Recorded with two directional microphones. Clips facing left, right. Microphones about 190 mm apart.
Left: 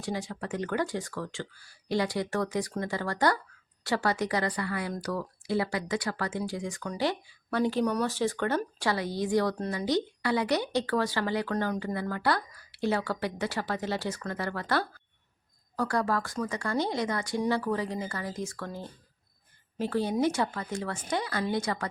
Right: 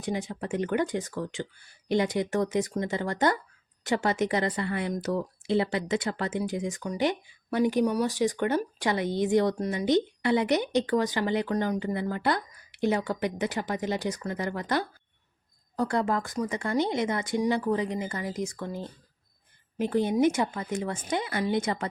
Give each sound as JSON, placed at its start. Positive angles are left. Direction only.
{"t": 0.0, "sound": "a woman's voice", "side_deg": -20}